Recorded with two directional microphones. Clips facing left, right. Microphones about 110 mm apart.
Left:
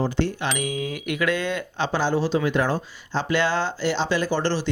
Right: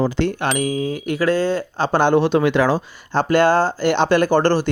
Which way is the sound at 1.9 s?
60° right (ahead or behind).